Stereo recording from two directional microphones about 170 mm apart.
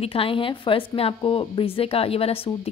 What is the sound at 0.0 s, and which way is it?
A woman's voice, 35° left (ahead or behind).